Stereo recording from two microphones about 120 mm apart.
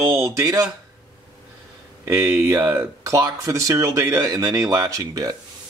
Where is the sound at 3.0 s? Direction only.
25° right (ahead or behind).